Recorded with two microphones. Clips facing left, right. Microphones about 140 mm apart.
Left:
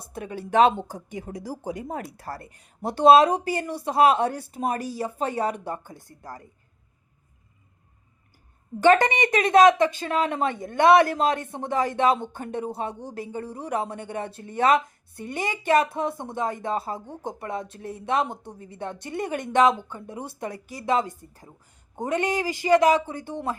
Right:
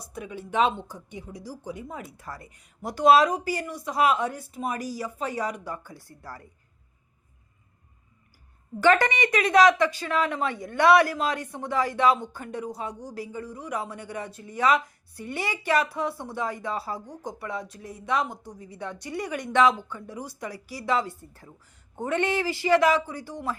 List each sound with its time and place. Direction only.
0.1 s speech: 65° left (ahead or behind)
0.5 s speech: 40° left (ahead or behind)
1.2 s speech: 65° left (ahead or behind)
2.6 s speech: 30° left (ahead or behind)
8.8 s speech: 20° left (ahead or behind)
14.3 s speech: 60° left (ahead or behind)
14.8 s speech: 25° left (ahead or behind)
17.8 s speech: 60° left (ahead or behind)
18.2 s speech: 25° left (ahead or behind)
18.5 s speech: 55° left (ahead or behind)
19.8 s speech: 20° left (ahead or behind)